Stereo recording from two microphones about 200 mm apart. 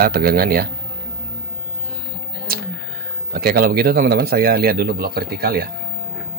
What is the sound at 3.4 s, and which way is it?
A man's voice, 50° right (ahead or behind).